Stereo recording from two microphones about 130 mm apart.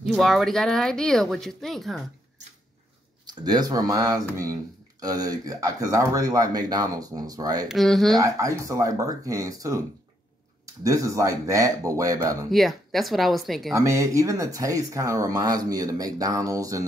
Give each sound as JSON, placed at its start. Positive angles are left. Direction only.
{"t": 0.0, "sound": "speech", "side_deg": 0}
{"t": 3.3, "sound": "speech", "side_deg": -30}
{"t": 7.6, "sound": "speech", "side_deg": 0}
{"t": 8.2, "sound": "speech", "side_deg": -25}
{"t": 10.8, "sound": "speech", "side_deg": -25}
{"t": 12.4, "sound": "speech", "side_deg": 0}
{"t": 13.7, "sound": "speech", "side_deg": -25}